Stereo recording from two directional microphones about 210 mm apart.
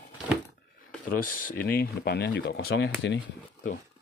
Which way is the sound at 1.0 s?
40° left (ahead or behind).